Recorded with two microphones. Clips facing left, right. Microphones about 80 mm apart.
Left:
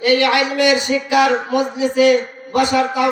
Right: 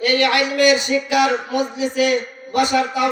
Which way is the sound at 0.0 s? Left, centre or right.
Centre.